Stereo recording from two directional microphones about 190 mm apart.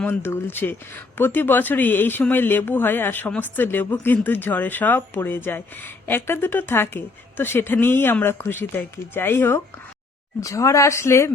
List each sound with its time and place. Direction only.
0.0 s speech: 10° left (ahead or behind)